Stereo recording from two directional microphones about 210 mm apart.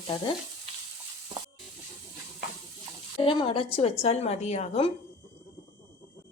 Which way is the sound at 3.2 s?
25° left (ahead or behind).